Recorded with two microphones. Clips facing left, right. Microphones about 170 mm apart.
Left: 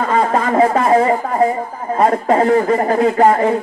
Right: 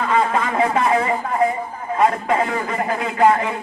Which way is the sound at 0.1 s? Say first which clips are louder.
Left 4 dB; 45° left (ahead or behind).